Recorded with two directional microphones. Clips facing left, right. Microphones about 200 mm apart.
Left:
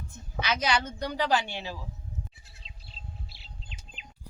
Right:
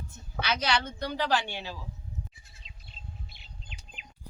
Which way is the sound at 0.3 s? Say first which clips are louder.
Left 1 dB; 10° left (ahead or behind).